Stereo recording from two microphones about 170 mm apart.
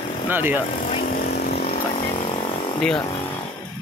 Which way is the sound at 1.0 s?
60° left (ahead or behind).